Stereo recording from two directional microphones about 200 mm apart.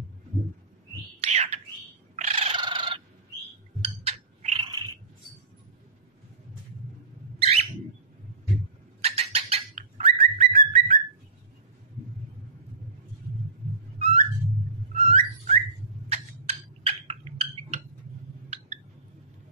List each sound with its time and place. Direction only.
1.2 s bird: 30° right (ahead or behind)
2.1 s cat: 30° right (ahead or behind)
3.8 s a sound: 30° right (ahead or behind)
7.3 s bird: 30° right (ahead or behind)
9.0 s bird: 30° right (ahead or behind)
13.9 s a sound: 30° right (ahead or behind)
15.0 s whistling: 30° right (ahead or behind)
16.1 s tick-tock: 30° right (ahead or behind)